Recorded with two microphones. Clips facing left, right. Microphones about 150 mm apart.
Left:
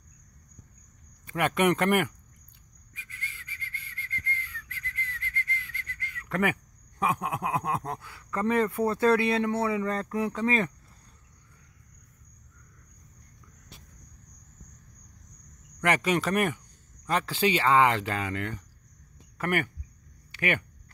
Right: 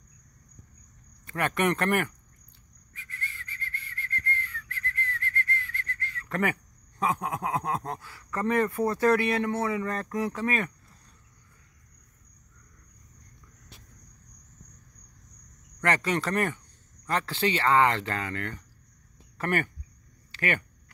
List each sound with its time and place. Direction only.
1.2 s speech: 15° left (ahead or behind)
2.9 s whistling: 15° left (ahead or behind)
15.8 s speech: 15° left (ahead or behind)
20.2 s a sound: 15° left (ahead or behind)